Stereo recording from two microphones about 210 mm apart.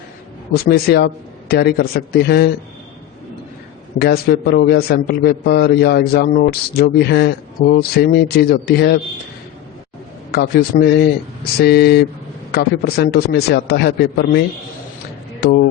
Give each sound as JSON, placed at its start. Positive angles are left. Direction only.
{"t": 0.5, "sound": "a man's voice", "side_deg": 50}
{"t": 3.9, "sound": "a man's voice", "side_deg": 50}
{"t": 10.3, "sound": "a man's voice", "side_deg": 50}